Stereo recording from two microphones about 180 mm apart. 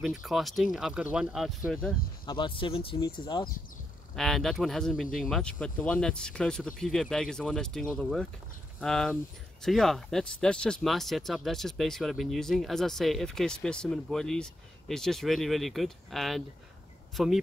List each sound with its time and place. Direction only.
0.0 s speech: centre (ahead or behind)
2.2 s speech: 25° left (ahead or behind)
4.1 s speech: centre (ahead or behind)